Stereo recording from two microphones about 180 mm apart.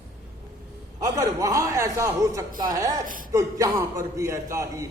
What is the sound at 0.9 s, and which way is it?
A man's voice, 20° right (ahead or behind).